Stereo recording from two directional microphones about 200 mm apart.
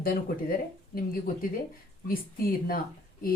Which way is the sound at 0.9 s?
45° left (ahead or behind).